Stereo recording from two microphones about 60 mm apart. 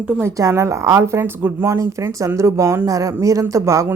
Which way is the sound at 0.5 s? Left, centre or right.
Right.